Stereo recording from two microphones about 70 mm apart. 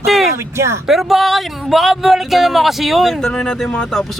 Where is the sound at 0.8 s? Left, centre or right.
Centre.